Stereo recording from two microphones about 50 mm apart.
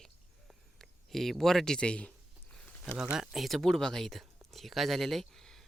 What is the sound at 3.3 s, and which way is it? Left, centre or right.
Speech, centre.